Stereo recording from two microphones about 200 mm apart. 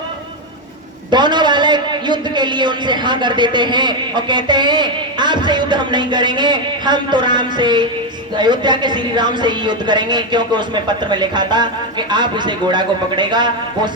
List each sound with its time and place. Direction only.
1.1 s a man's voice: 20° right (ahead or behind)